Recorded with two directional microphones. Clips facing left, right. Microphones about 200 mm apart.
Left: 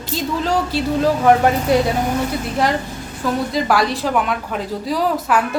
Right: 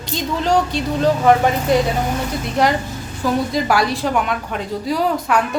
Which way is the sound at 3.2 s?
Centre (ahead or behind).